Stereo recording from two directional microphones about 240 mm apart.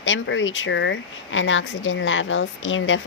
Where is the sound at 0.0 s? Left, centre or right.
Left.